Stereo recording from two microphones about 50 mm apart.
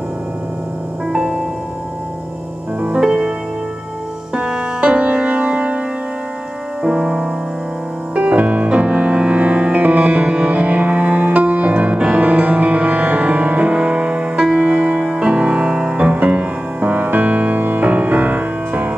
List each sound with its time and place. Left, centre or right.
1.1 s music: centre
3.0 s music: centre
4.4 s music: centre
6.8 s music: centre